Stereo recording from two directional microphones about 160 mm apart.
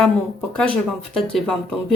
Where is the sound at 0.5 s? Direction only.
5° left (ahead or behind).